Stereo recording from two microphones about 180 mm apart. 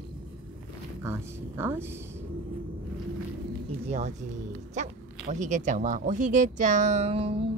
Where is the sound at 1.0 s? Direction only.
15° right (ahead or behind).